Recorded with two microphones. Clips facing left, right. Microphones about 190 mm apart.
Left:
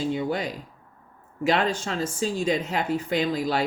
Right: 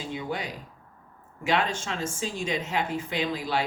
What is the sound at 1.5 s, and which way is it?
Speech, 35° left (ahead or behind).